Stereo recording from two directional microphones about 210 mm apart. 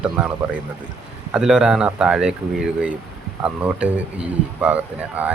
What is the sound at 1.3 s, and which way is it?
Speech, centre (ahead or behind).